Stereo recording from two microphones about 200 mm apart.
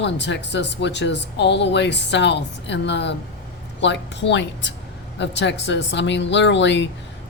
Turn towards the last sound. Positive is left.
turn(degrees=65)  # may be behind; listen again after turning